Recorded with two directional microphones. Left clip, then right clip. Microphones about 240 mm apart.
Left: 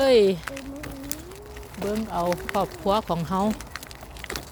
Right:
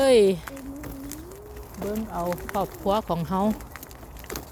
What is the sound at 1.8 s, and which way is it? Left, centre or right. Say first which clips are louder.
Speech: left 3 dB; centre.